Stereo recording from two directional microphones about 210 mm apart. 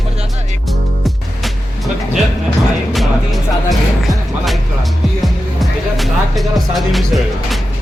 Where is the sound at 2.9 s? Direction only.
Centre (ahead or behind).